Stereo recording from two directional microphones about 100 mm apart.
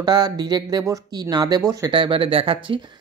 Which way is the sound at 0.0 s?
40° right (ahead or behind).